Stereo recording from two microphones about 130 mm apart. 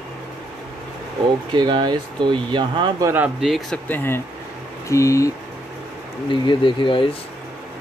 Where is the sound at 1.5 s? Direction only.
35° right (ahead or behind).